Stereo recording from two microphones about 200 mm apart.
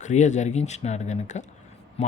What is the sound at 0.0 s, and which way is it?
Speech, 35° left (ahead or behind).